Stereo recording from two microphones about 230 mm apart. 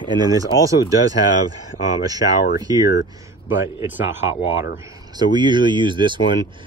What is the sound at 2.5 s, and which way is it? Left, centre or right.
Speech, centre.